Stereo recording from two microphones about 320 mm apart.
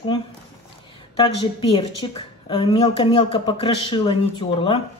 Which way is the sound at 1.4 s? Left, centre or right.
Centre.